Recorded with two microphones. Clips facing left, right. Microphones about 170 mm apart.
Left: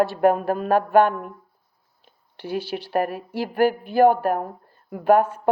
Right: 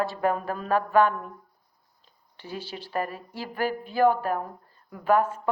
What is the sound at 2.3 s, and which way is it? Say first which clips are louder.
A woman's voice: left 9 dB; 70° left (ahead or behind).